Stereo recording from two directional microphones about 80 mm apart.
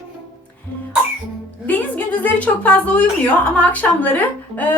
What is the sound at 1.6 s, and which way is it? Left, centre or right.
A woman's voice, left.